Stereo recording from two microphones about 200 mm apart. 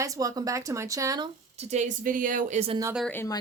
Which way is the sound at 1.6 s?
35° right (ahead or behind).